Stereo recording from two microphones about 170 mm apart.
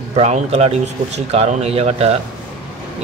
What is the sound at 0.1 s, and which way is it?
Speech, 40° right (ahead or behind).